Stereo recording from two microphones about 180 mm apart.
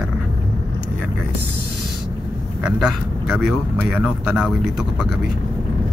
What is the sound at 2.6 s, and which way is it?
Speech, 5° right (ahead or behind).